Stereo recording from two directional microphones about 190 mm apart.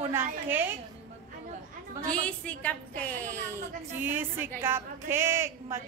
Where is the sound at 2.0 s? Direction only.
5° left (ahead or behind).